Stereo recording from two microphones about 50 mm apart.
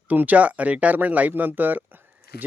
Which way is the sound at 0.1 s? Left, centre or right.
Right.